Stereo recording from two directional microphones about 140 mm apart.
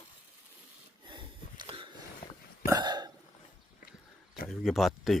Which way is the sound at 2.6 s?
25° right (ahead or behind).